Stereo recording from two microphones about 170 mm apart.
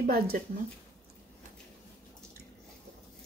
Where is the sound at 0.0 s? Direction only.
60° right (ahead or behind).